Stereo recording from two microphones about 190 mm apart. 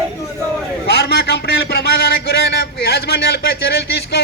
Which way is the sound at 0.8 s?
60° left (ahead or behind).